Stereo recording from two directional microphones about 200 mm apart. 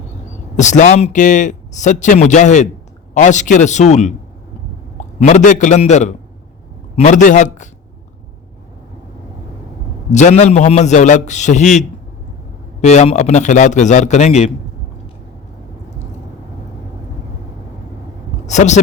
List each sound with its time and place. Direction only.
0.5 s a man's voice: 35° left (ahead or behind)
10.1 s a man's voice: 35° left (ahead or behind)
12.8 s a man's voice: 35° left (ahead or behind)
18.4 s a man's voice: 35° left (ahead or behind)